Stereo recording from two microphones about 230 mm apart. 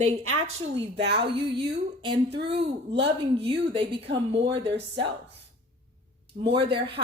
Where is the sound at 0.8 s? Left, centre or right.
Right.